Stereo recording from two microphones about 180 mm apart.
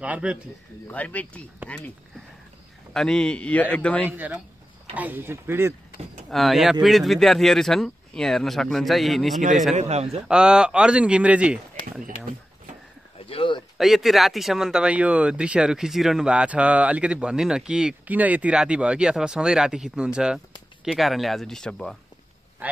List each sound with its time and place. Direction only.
0.0 s speech: 5° right (ahead or behind)
0.8 s speech: 10° left (ahead or behind)
2.9 s speech: 5° left (ahead or behind)
4.1 s speech: 10° right (ahead or behind)
6.3 s speech: centre (ahead or behind)
9.4 s a man's voice: 45° right (ahead or behind)
10.2 s speech: 5° right (ahead or behind)
13.2 s a sound: 30° left (ahead or behind)
13.7 s speech: centre (ahead or behind)
22.6 s vehicle: 10° right (ahead or behind)